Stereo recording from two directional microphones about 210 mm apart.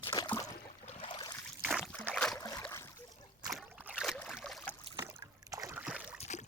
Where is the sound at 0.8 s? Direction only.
30° left (ahead or behind).